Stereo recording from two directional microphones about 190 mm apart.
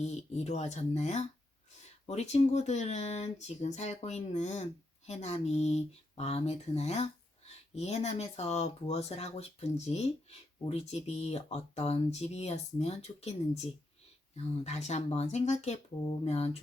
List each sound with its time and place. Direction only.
0.0 s speech: 35° left (ahead or behind)